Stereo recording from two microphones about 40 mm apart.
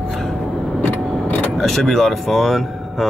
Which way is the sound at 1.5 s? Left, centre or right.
Centre.